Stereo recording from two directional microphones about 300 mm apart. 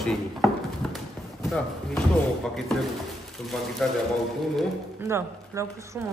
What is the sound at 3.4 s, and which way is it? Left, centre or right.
Speech, centre.